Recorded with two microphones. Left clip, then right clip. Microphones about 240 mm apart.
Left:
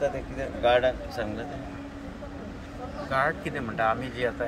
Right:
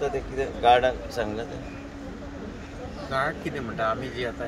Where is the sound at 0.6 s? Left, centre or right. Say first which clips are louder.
Right 3 dB; centre.